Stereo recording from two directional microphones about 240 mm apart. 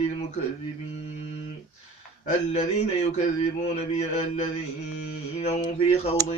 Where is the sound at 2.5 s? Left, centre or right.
Left.